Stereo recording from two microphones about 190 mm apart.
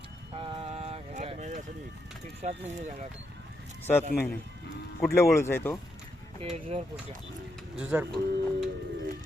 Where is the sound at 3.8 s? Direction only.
10° left (ahead or behind).